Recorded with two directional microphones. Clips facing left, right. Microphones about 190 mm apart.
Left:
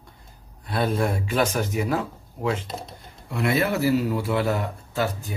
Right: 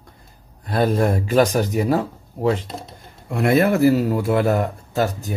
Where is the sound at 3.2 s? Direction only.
50° right (ahead or behind).